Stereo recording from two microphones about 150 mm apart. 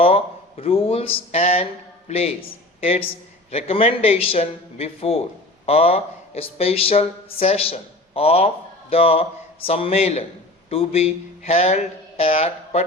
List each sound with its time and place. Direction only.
0.0 s a man's voice: 40° left (ahead or behind)